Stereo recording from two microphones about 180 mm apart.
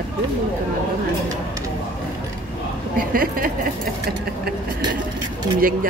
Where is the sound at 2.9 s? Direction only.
55° right (ahead or behind).